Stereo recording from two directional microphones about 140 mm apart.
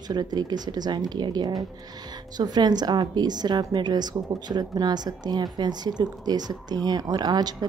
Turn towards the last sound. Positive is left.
turn(degrees=-30)  # may be behind; listen again after turning